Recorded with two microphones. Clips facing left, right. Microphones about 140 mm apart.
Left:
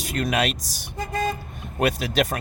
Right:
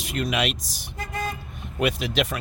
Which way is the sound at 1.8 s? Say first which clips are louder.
Left 2 dB; 45° left (ahead or behind).